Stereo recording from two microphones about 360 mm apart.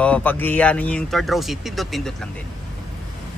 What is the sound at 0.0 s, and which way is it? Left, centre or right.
Speech, centre.